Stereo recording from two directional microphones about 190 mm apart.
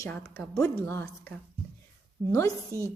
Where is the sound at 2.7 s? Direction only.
15° left (ahead or behind).